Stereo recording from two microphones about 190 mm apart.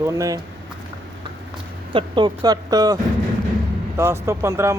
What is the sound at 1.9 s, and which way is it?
Speech, 25° right (ahead or behind).